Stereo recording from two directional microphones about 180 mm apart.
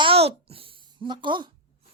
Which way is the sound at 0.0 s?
35° right (ahead or behind).